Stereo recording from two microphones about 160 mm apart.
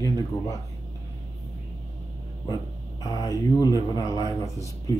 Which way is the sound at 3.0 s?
25° left (ahead or behind).